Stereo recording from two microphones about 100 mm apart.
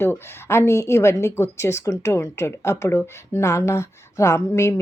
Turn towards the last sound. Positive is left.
turn(degrees=30)  # may be behind; listen again after turning